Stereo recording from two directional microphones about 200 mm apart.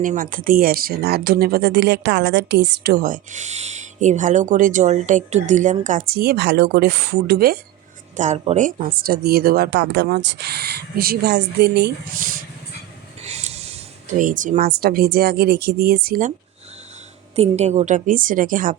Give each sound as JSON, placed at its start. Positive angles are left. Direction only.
{"t": 0.0, "sound": "speech", "side_deg": -40}
{"t": 8.1, "sound": "speech", "side_deg": -35}
{"t": 13.2, "sound": "snort", "side_deg": -35}
{"t": 14.1, "sound": "speech", "side_deg": -40}
{"t": 17.3, "sound": "a woman's voice", "side_deg": -35}